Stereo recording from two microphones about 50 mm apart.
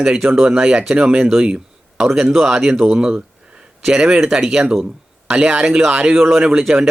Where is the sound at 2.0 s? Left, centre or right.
Centre.